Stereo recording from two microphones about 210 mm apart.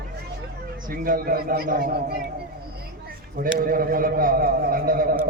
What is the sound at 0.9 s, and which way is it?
A man's voice, 40° right (ahead or behind).